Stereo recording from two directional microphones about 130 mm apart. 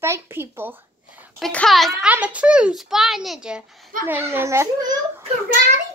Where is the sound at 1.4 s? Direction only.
5° left (ahead or behind).